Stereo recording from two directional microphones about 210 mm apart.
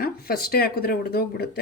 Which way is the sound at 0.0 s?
45° left (ahead or behind).